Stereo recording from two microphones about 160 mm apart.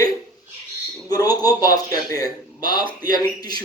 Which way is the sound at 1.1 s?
25° left (ahead or behind).